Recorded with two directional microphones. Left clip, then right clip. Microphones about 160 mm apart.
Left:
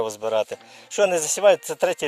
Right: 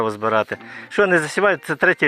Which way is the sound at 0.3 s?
40° left (ahead or behind).